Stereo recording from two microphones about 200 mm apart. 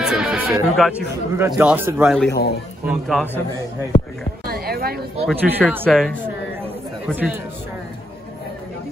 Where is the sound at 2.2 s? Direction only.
55° left (ahead or behind).